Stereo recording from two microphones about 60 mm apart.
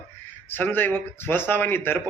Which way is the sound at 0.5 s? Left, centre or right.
Left.